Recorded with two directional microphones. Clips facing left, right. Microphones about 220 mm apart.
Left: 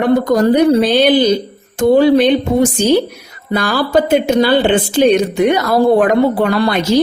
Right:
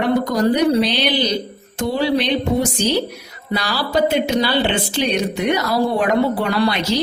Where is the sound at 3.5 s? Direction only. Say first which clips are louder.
Left 7 dB; 50° left (ahead or behind).